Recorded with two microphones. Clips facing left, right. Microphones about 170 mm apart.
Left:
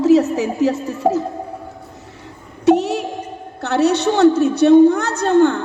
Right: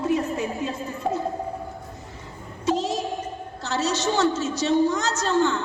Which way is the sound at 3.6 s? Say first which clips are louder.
Left 9 dB; 60° left (ahead or behind).